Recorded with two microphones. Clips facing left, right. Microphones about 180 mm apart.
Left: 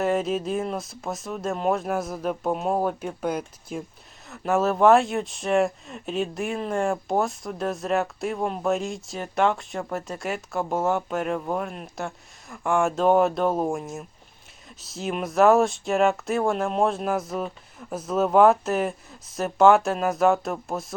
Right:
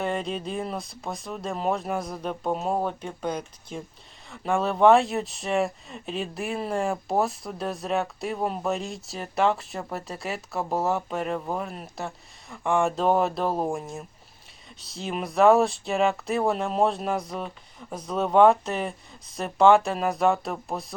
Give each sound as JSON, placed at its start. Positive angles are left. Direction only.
{"t": 0.0, "sound": "speech", "side_deg": 5}